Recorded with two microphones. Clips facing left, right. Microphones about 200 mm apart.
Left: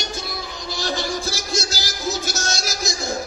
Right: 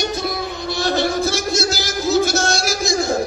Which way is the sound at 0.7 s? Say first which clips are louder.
Right 7 dB; 60° right (ahead or behind).